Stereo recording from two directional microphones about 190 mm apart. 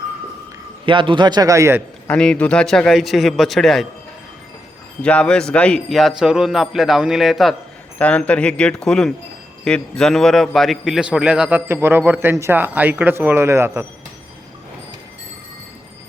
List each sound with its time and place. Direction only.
0.9 s speech: 25° right (ahead or behind)
2.0 s a man's voice: 5° left (ahead or behind)
5.0 s a man's voice: 5° left (ahead or behind); by 13.8 s 15° right (ahead or behind)